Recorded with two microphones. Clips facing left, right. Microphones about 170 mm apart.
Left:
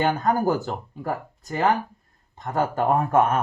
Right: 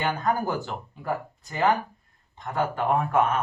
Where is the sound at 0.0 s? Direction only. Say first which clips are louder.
Left 5 dB; 45° left (ahead or behind).